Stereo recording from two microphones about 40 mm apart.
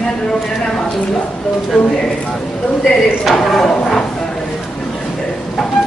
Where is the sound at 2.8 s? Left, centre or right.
Centre.